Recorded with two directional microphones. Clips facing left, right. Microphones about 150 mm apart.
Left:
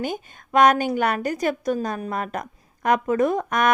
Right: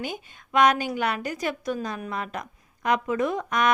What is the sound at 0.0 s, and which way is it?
A woman's voice, 45° left (ahead or behind).